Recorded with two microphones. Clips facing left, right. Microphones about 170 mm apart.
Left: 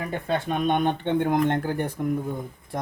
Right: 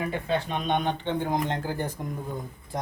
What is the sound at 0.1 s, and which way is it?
Speech, 50° left (ahead or behind).